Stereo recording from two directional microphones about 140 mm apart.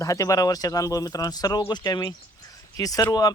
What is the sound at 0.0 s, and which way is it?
Speech, 25° left (ahead or behind).